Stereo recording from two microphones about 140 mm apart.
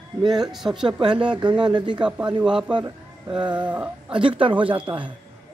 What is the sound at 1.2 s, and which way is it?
Speech, 35° right (ahead or behind).